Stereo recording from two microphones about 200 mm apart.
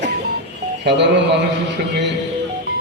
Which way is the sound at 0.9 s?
60° right (ahead or behind).